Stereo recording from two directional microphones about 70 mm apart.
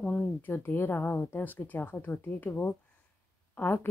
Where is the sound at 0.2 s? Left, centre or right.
Left.